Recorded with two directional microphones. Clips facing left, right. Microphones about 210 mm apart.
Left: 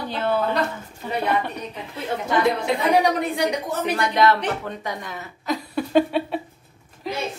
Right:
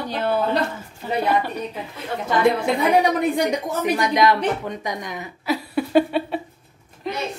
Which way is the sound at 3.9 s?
15° right (ahead or behind).